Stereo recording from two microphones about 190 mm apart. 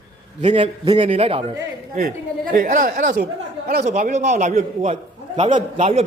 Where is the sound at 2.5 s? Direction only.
45° right (ahead or behind).